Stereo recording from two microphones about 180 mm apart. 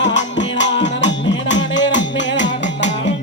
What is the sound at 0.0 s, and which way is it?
Music, 80° left.